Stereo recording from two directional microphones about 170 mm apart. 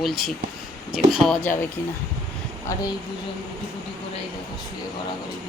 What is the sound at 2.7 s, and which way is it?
Speech, 20° left (ahead or behind).